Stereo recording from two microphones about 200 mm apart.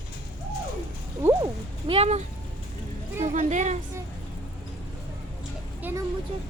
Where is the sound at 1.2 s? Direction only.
20° right (ahead or behind).